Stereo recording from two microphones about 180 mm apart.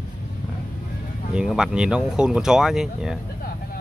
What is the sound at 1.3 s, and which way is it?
Speech, 5° right (ahead or behind).